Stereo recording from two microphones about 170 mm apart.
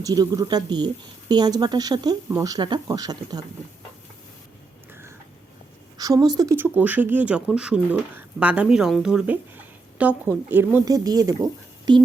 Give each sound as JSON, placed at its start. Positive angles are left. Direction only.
{"t": 0.0, "sound": "speech", "side_deg": -20}
{"t": 6.0, "sound": "speech", "side_deg": -20}